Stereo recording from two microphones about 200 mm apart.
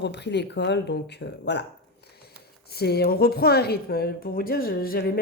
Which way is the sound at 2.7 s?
50° left (ahead or behind).